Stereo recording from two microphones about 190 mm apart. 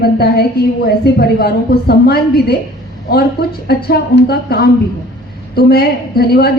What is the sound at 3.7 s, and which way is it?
A woman's voice, 55° left (ahead or behind).